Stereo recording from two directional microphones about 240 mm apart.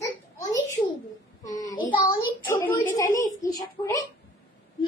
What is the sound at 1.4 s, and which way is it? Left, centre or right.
Child singing, centre.